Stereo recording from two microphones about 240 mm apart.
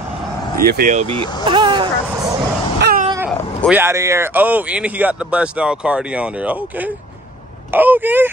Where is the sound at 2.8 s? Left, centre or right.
Right.